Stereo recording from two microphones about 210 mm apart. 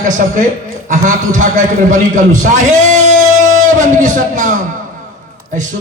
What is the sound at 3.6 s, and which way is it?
Speech, 35° right (ahead or behind).